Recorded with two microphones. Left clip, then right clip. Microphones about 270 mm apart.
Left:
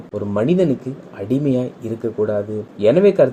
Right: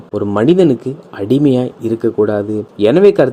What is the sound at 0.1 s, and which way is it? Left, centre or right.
Speech, right.